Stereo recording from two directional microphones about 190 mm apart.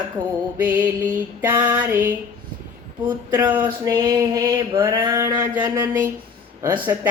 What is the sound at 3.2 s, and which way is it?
Speech, 10° right (ahead or behind).